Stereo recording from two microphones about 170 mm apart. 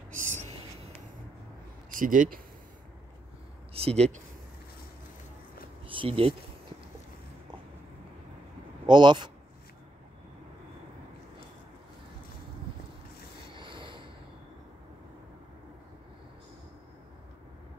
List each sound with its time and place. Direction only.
0.2 s a sound: 45° right (ahead or behind)
1.9 s speech: 55° right (ahead or behind)
3.7 s speech: 35° right (ahead or behind)
5.9 s speech: 30° right (ahead or behind)
8.8 s speech: 25° right (ahead or behind)
13.5 s a sound: 30° right (ahead or behind)